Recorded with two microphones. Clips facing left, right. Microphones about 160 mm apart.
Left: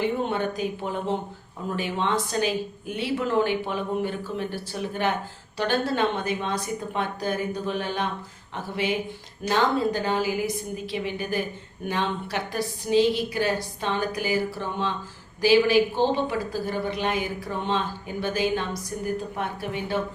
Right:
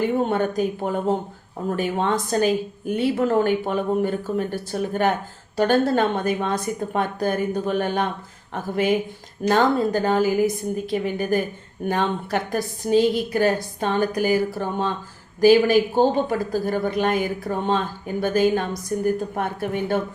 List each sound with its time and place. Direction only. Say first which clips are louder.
0.0 s speech: right 4 dB; 45° right (ahead or behind)